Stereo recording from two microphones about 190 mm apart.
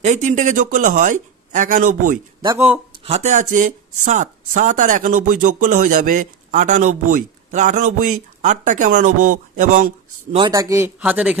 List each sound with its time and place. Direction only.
0.0 s speech: 40° right (ahead or behind)
10.3 s speech: 20° right (ahead or behind)